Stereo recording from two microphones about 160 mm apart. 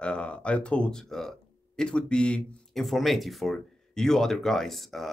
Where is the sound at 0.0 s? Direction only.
5° left (ahead or behind).